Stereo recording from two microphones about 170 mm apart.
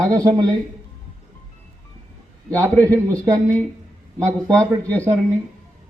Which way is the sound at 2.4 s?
20° right (ahead or behind).